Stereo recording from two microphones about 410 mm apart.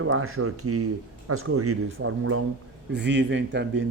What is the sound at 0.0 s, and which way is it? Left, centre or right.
Speech, right.